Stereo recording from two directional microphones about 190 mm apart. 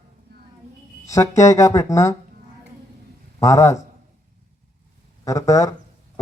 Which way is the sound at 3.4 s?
15° left (ahead or behind).